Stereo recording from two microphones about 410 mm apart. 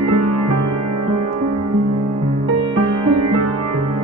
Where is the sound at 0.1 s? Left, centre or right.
Right.